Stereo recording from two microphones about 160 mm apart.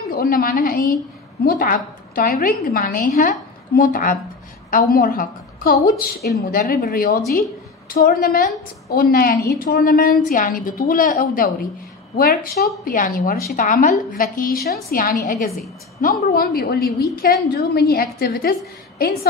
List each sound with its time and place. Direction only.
0.1 s a woman's voice: 65° left (ahead or behind)
12.2 s a woman's voice: 70° left (ahead or behind)
12.8 s a woman's voice: 60° left (ahead or behind)